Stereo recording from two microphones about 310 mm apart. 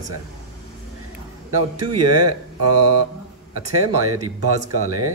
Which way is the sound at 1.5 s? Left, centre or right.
Right.